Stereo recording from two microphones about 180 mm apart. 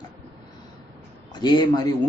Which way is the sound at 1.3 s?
25° left (ahead or behind).